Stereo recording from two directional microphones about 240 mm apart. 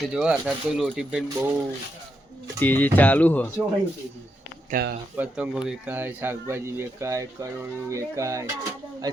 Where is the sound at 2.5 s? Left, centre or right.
Centre.